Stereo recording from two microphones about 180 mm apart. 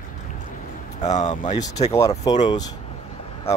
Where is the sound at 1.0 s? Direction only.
40° left (ahead or behind).